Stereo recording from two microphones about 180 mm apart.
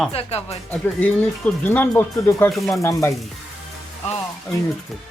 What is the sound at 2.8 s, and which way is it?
Speech, 15° left (ahead or behind).